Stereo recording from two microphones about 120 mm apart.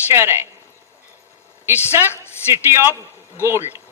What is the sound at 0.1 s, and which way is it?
Speech, 20° right (ahead or behind).